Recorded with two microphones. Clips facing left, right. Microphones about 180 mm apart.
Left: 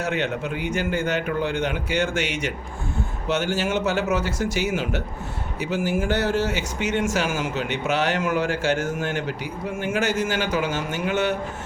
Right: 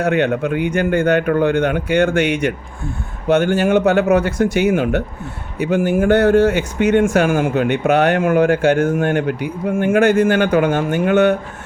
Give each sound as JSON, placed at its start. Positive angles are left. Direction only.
{"t": 0.0, "sound": "speech", "side_deg": -60}